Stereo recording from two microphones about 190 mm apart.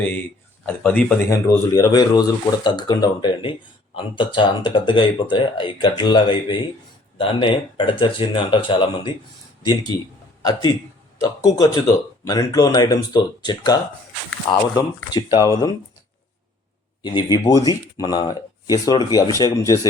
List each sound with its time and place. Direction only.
0.6 s speech: 10° left (ahead or behind); by 9.1 s 25° left (ahead or behind)
11.2 s speech: 20° left (ahead or behind)
17.0 s speech: 20° left (ahead or behind)